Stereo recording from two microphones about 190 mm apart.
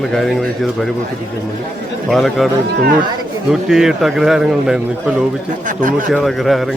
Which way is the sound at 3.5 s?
Centre (ahead or behind).